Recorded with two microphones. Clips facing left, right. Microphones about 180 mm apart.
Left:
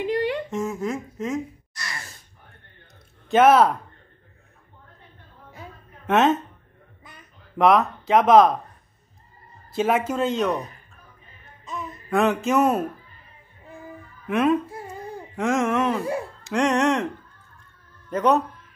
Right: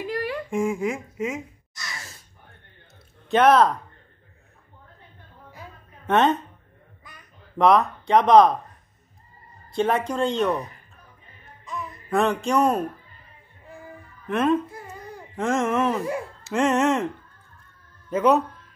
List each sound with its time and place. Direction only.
0.0 s a sound: 20° left (ahead or behind)
0.5 s speech: 10° right (ahead or behind)
3.3 s speech: 5° left (ahead or behind)
6.0 s speech: centre (ahead or behind)
7.5 s speech: centre (ahead or behind)
9.7 s speech: 5° left (ahead or behind)
12.1 s speech: centre (ahead or behind)
14.2 s speech: centre (ahead or behind)
18.1 s speech: 5° right (ahead or behind)